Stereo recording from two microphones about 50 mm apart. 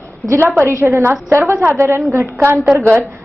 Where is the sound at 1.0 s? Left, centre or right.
Right.